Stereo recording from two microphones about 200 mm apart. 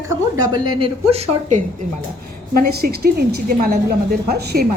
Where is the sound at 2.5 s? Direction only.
50° right (ahead or behind).